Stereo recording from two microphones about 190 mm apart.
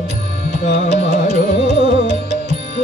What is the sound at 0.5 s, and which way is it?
Music, 40° left (ahead or behind).